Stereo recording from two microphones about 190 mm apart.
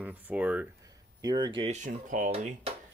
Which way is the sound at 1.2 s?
20° right (ahead or behind).